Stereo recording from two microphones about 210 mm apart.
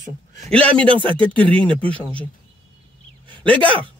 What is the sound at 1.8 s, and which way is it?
Speech, 25° right (ahead or behind).